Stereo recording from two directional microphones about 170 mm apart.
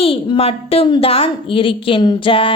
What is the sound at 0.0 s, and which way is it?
A woman's voice, 35° left (ahead or behind).